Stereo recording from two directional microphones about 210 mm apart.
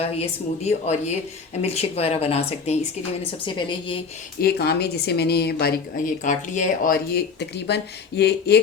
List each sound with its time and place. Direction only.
0.0 s speech: 30° left (ahead or behind)
4.4 s speech: 50° left (ahead or behind)
6.2 s speech: 35° left (ahead or behind)